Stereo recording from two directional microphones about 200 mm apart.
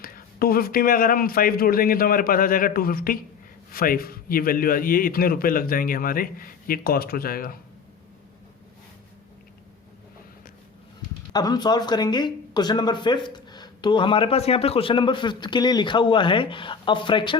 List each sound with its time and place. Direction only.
0.0 s a man's voice: 45° left (ahead or behind)
11.3 s speech: 20° left (ahead or behind)